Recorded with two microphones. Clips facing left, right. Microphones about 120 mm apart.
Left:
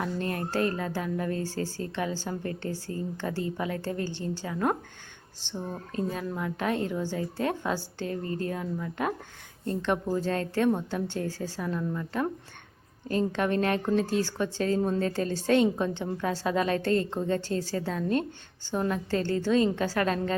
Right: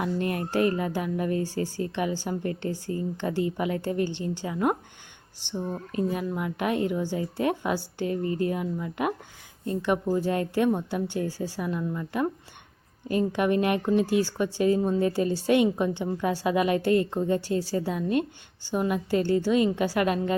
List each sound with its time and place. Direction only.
0.0 s a woman's voice: 15° right (ahead or behind)